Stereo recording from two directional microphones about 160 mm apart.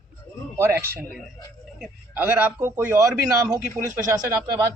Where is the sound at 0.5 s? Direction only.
15° right (ahead or behind).